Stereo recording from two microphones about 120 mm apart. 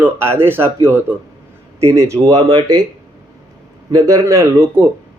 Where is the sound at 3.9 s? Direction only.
30° right (ahead or behind).